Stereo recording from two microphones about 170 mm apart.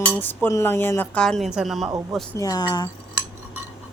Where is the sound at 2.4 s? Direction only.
25° left (ahead or behind).